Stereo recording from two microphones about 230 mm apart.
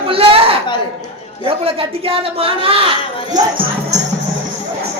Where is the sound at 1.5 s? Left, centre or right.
Right.